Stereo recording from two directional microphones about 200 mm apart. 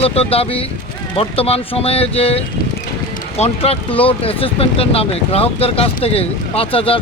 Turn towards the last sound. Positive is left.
turn(degrees=25)  # may be behind; listen again after turning